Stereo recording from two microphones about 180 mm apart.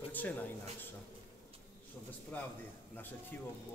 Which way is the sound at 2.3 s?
10° left (ahead or behind).